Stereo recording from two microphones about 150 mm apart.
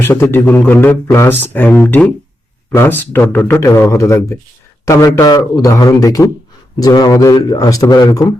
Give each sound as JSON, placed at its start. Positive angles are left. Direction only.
{"t": 0.0, "sound": "a man's voice", "side_deg": 15}